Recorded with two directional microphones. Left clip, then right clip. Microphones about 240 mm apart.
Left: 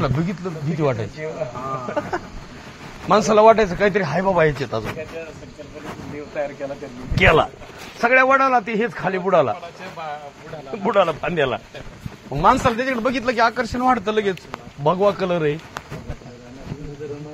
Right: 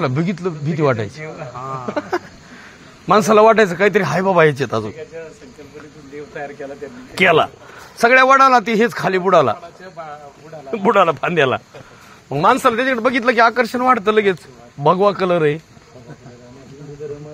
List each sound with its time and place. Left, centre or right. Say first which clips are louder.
0.0 s a man's voice: right 4 dB; right
7.2 s a man's voice: right 2 dB; right
10.7 s a man's voice: right 5 dB; right